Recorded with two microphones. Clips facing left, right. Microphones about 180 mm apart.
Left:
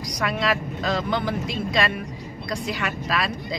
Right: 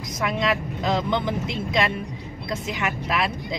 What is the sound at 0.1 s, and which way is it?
Speech, 20° right (ahead or behind).